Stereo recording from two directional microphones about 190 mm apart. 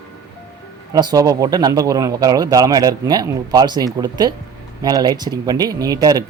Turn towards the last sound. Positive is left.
turn(degrees=-20)  # may be behind; listen again after turning